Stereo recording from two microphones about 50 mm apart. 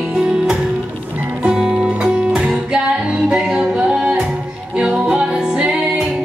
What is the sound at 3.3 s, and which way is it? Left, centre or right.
Music, centre.